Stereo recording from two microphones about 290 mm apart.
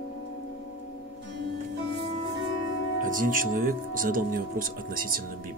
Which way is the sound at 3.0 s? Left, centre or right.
Right.